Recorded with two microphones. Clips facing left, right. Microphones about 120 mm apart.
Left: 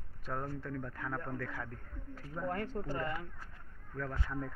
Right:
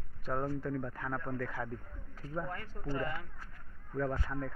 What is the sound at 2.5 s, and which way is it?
Speech, 65° left (ahead or behind).